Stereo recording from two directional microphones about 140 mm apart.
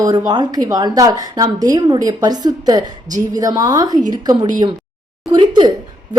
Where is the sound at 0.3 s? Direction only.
30° right (ahead or behind).